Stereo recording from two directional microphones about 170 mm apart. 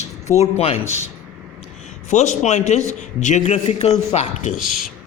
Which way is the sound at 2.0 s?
45° left (ahead or behind).